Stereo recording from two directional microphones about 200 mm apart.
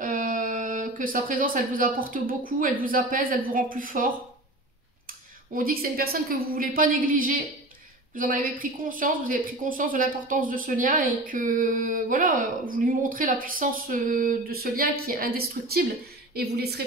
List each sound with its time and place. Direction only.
0.0 s a woman's voice: 45° right (ahead or behind)